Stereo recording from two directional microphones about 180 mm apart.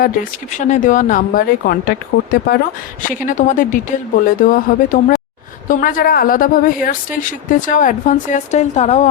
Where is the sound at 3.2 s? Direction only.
45° left (ahead or behind).